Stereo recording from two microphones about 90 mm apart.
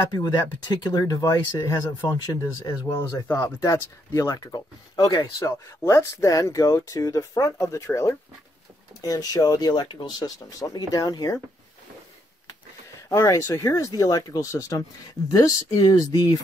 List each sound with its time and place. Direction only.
0.0 s speech: 50° left (ahead or behind)
3.3 s speech: 30° left (ahead or behind)
13.1 s speech: 35° left (ahead or behind)